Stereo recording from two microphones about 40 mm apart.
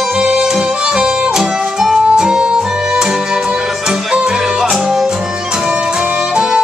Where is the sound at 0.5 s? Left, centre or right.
Centre.